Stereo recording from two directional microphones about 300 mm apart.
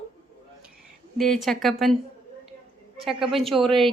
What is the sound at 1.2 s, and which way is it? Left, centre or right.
Speech, centre.